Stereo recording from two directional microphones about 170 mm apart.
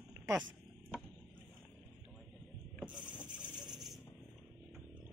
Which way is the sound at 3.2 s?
Centre (ahead or behind).